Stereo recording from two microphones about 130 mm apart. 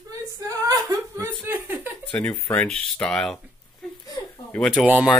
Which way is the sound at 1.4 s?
15° right (ahead or behind).